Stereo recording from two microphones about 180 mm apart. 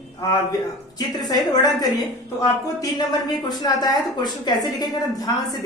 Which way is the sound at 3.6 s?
25° left (ahead or behind).